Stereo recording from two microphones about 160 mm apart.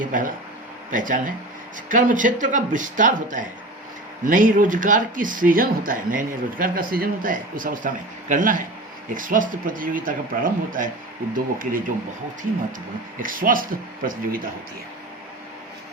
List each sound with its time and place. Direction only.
0.0 s speech: 55° right (ahead or behind)
13.1 s speech: 60° right (ahead or behind)